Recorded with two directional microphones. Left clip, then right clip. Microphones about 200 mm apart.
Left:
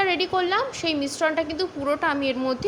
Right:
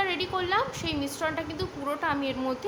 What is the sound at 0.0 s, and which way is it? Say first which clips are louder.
A woman's voice: left 6 dB; 25° left (ahead or behind).